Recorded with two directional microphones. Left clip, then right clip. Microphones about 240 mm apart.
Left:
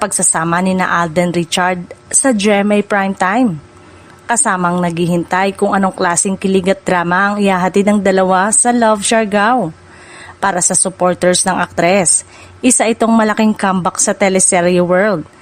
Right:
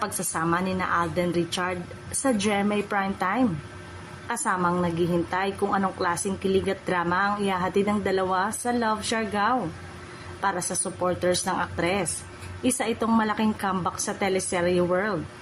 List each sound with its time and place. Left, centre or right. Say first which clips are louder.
0.0 s a woman's voice: left 12 dB; left